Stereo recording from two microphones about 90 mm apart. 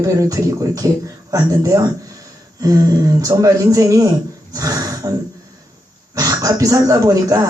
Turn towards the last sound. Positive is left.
turn(degrees=-40)  # may be behind; listen again after turning